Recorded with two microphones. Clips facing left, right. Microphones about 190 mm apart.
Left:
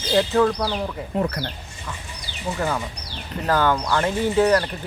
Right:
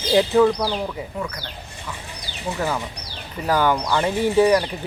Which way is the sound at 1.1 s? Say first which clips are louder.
Left 6 dB; 55° left (ahead or behind).